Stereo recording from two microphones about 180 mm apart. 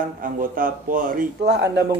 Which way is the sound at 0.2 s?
50° right (ahead or behind).